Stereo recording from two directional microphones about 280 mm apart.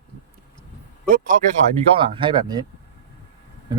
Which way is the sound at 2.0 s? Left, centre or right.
Centre.